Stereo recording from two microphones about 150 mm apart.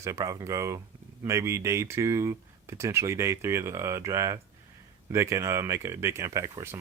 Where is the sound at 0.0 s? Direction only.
20° right (ahead or behind).